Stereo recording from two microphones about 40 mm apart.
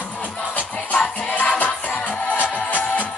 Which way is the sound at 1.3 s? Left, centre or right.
Left.